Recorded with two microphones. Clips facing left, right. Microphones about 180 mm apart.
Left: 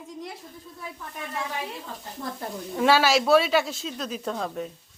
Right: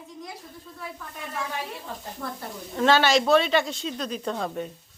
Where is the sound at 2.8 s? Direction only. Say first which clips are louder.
Even; 5° left (ahead or behind).